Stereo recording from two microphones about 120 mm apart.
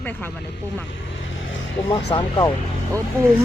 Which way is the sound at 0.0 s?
15° left (ahead or behind).